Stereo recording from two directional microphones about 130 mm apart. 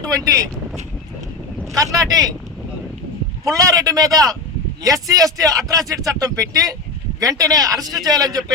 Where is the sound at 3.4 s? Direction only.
25° right (ahead or behind).